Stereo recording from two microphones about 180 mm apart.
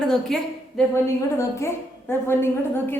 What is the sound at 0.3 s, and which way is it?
Speech, centre (ahead or behind).